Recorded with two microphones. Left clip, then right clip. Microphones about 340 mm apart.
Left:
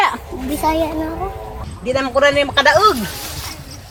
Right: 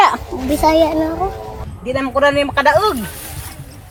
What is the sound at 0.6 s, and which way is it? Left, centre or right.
Speech, right.